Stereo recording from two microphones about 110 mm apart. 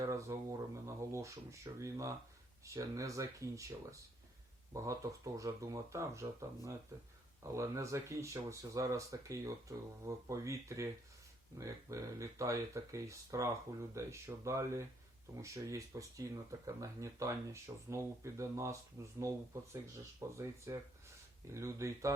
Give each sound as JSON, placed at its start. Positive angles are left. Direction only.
{"t": 0.0, "sound": "speech", "side_deg": -30}